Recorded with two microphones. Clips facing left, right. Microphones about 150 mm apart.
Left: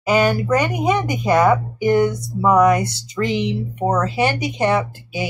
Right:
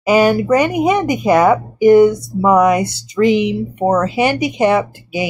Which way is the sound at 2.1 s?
Centre (ahead or behind).